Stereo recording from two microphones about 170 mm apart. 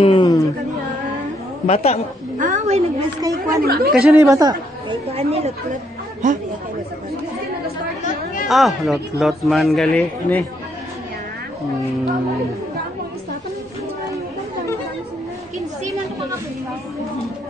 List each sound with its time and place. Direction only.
0.0 s chatter: 25° left (ahead or behind)
1.7 s a man's voice: 35° left (ahead or behind)
2.3 s a woman's voice: 50° right (ahead or behind)
3.2 s speech: 20° right (ahead or behind)
3.6 s speech: 65° right (ahead or behind)
4.1 s a woman's voice: 20° right (ahead or behind)
5.1 s speech: 35° right (ahead or behind)
8.5 s speech: centre (ahead or behind)